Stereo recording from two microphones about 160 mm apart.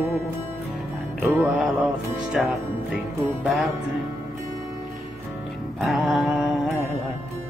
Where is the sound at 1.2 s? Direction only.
10° right (ahead or behind).